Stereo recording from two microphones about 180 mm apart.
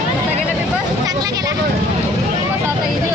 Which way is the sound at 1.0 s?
20° right (ahead or behind).